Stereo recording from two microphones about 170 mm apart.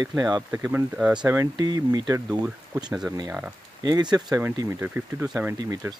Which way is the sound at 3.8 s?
25° right (ahead or behind).